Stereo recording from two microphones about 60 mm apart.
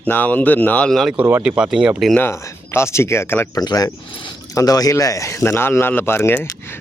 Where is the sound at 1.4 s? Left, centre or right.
Centre.